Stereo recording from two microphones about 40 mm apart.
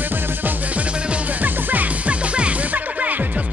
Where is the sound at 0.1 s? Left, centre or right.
Right.